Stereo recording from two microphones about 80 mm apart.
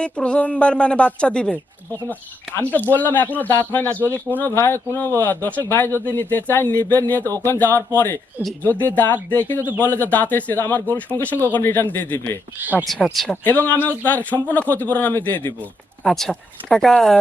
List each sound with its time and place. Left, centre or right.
0.0 s a woman's voice: centre
2.6 s speech: left
13.1 s speech: centre
13.3 s speech: left
16.0 s a woman's voice: centre